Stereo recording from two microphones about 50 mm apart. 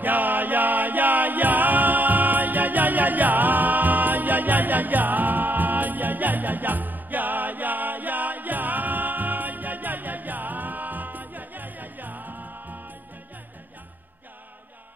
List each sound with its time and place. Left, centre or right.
0.0 s music: right